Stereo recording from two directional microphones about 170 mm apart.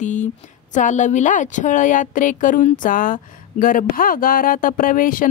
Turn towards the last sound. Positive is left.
turn(degrees=55)  # may be behind; listen again after turning